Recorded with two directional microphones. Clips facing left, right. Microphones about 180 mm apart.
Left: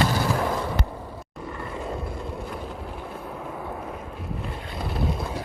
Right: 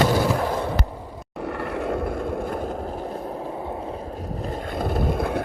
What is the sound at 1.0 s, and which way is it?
Vehicle, 15° right (ahead or behind).